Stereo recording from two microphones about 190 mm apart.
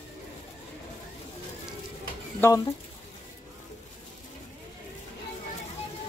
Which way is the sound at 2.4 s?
15° left (ahead or behind).